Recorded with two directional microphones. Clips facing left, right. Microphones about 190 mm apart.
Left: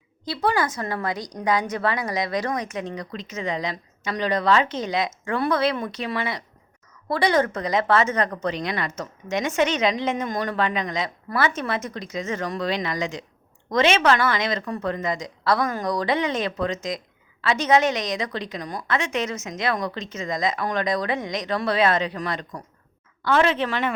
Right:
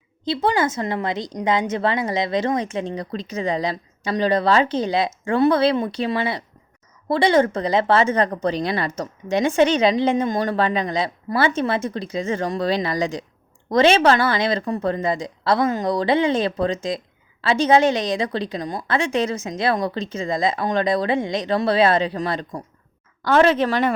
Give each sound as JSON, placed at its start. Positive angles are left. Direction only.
{"t": 0.4, "sound": "a woman's voice", "side_deg": -25}
{"t": 23.2, "sound": "a woman's voice", "side_deg": -40}